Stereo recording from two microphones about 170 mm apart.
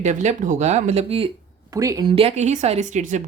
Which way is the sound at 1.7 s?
20° right (ahead or behind).